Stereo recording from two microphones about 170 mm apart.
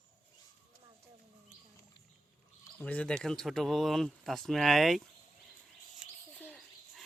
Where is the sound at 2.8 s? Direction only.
10° left (ahead or behind).